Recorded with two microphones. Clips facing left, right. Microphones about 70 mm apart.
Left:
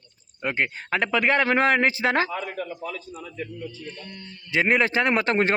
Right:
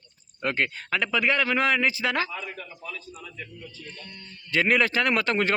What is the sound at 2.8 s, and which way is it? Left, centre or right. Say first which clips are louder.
Speech: left 5 dB; left.